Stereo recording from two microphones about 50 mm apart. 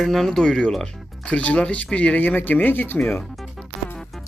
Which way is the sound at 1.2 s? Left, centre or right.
Left.